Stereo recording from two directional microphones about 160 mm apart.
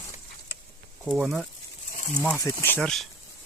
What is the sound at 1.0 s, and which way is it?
Speech, 5° right (ahead or behind).